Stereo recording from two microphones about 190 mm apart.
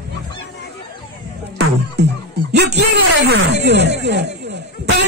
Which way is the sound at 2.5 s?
60° right (ahead or behind).